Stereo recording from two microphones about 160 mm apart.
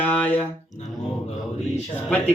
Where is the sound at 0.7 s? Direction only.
45° left (ahead or behind).